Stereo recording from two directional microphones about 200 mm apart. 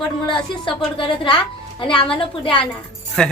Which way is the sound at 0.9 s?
25° left (ahead or behind).